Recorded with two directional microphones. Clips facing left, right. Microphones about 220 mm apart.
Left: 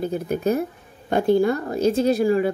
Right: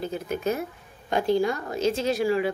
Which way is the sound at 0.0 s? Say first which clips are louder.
Left 5 dB; 55° left (ahead or behind).